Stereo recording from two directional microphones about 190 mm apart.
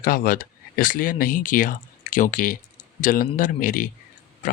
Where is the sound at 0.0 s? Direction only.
50° left (ahead or behind).